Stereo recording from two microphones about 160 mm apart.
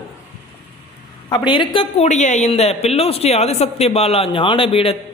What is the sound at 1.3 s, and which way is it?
Speech, 30° left (ahead or behind).